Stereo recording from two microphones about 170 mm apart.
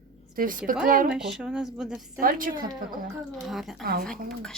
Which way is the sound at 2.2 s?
55° right (ahead or behind).